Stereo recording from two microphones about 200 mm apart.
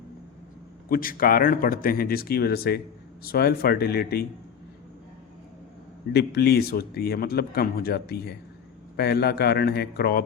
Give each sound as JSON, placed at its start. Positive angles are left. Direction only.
{"t": 0.9, "sound": "a man's voice", "side_deg": 45}
{"t": 6.1, "sound": "a man's voice", "side_deg": 55}